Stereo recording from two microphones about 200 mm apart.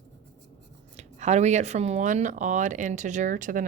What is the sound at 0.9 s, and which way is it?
Speech, 35° right (ahead or behind).